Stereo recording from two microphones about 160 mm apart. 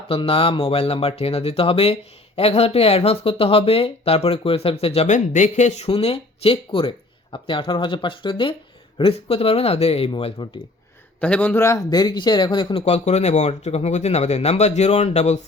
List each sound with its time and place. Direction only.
0.1 s speech: 35° left (ahead or behind)
11.2 s speech: 10° left (ahead or behind); by 15.4 s 45° left (ahead or behind)